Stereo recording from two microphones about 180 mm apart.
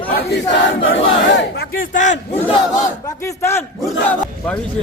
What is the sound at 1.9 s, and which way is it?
Speech, 40° left (ahead or behind).